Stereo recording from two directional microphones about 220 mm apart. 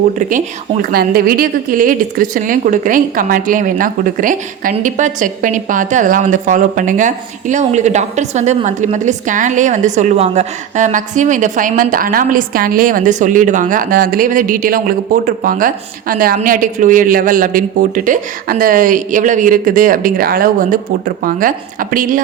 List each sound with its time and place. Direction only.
0.2 s a woman's voice: 35° right (ahead or behind)